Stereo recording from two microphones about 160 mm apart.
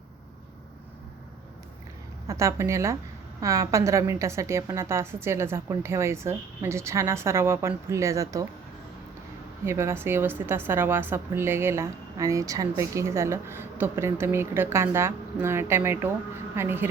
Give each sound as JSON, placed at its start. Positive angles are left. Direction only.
{"t": 2.2, "sound": "a woman's voice", "side_deg": -20}
{"t": 9.6, "sound": "a woman's voice", "side_deg": -15}